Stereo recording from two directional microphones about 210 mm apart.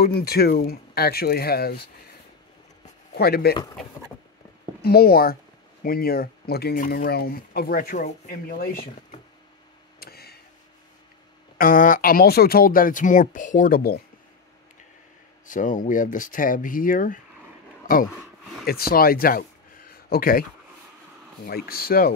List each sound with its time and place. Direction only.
0.0 s speech: 45° left (ahead or behind)
3.2 s speech: 50° left (ahead or behind)
4.8 s speech: 45° left (ahead or behind)
9.9 s tick-tock: 50° left (ahead or behind)
11.5 s speech: 40° left (ahead or behind)
15.4 s speech: 40° left (ahead or behind)
18.7 s speech: 45° left (ahead or behind)
21.5 s speech: 45° left (ahead or behind)